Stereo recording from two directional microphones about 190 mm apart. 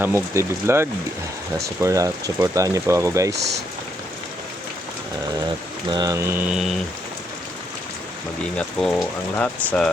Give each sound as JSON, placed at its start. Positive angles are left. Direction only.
{"t": 0.0, "sound": "speech", "side_deg": -15}
{"t": 3.3, "sound": "speech", "side_deg": -60}
{"t": 5.9, "sound": "speech", "side_deg": -20}
{"t": 8.5, "sound": "speech", "side_deg": 5}